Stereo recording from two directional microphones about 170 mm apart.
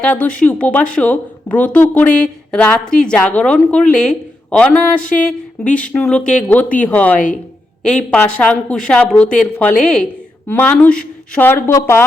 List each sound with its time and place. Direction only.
0.0 s a woman's voice: 10° left (ahead or behind)